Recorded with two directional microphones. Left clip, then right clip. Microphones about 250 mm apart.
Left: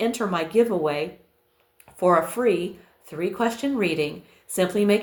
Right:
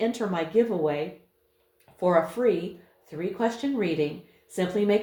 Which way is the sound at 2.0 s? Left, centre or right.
Left.